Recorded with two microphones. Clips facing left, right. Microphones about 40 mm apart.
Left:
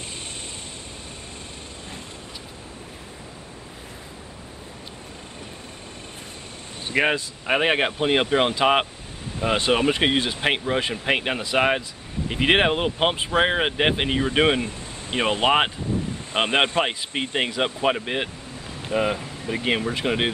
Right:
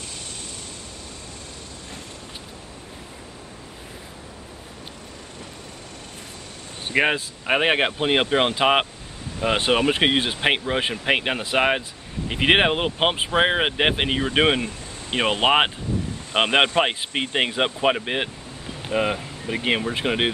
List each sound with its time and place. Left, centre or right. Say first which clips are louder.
6.9 s a man's voice: right 1 dB; centre